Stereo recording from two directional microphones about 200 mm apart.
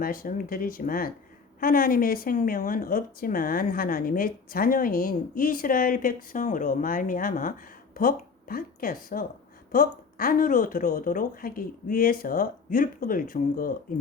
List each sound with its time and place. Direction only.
0.0 s speech: 45° left (ahead or behind)